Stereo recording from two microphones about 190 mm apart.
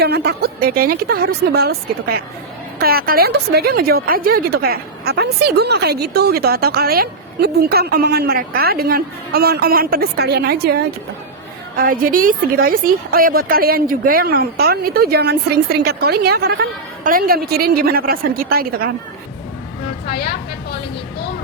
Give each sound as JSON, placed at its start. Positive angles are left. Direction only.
{"t": 0.0, "sound": "a woman's voice", "side_deg": -55}
{"t": 20.1, "sound": "speech", "side_deg": 60}